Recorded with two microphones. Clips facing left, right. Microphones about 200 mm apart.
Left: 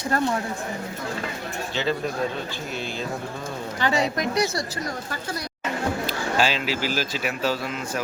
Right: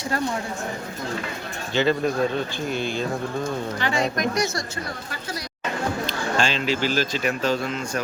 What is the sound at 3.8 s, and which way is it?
Speech, 40° left (ahead or behind).